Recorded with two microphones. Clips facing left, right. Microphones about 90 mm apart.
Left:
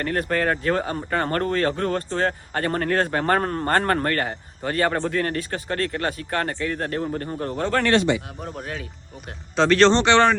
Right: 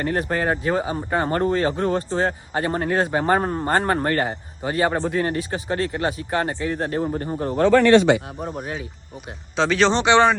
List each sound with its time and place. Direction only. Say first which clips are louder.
0.0 s speech: even; 20° right (ahead or behind)
7.6 s speech: right 7 dB; 65° right (ahead or behind)
8.4 s speech: right 3 dB; 20° right (ahead or behind)
9.6 s speech: left 2 dB; 5° right (ahead or behind)